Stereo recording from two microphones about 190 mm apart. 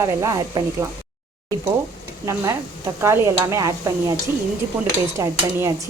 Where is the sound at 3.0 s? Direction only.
15° right (ahead or behind).